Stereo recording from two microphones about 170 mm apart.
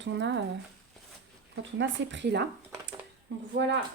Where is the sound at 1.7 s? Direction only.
90° right.